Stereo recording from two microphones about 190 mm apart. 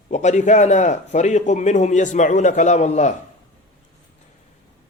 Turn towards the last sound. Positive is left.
turn(degrees=35)  # may be behind; listen again after turning